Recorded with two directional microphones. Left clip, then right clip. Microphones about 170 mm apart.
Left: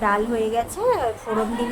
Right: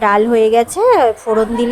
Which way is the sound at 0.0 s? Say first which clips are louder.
Right 10 dB; 45° right (ahead or behind).